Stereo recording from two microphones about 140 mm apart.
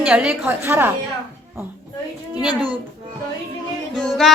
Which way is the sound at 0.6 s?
15° right (ahead or behind).